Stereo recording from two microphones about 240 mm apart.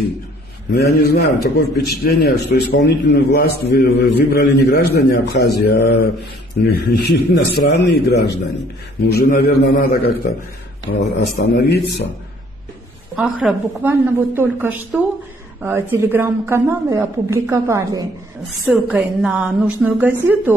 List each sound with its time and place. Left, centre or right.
0.7 s a man's voice: left
13.1 s a woman's voice: centre